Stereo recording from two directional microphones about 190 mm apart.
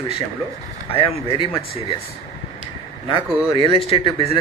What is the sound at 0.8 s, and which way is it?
Speech, 30° left (ahead or behind).